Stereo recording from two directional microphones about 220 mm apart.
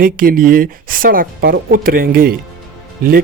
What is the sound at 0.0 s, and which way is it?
Speech, 40° right (ahead or behind).